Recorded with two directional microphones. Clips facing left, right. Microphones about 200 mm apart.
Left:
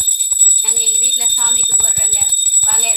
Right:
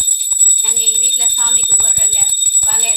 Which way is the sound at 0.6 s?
Centre (ahead or behind).